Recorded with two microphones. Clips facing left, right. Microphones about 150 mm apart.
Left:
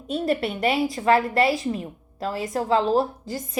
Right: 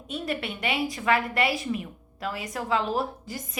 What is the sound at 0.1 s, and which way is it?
A woman's voice, 35° left (ahead or behind).